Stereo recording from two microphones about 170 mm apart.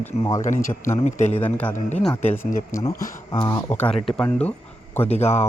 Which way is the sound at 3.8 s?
5° left (ahead or behind).